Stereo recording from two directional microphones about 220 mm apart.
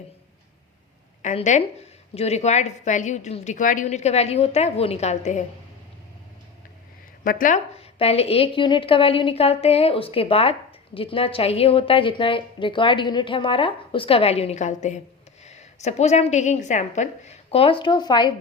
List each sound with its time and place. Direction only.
1.2 s a woman's voice: 30° left (ahead or behind)
7.3 s a woman's voice: 40° left (ahead or behind); by 18.3 s 20° left (ahead or behind)